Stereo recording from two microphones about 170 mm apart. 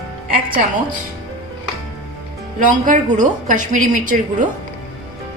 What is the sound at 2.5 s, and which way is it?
A woman's voice, 50° right (ahead or behind).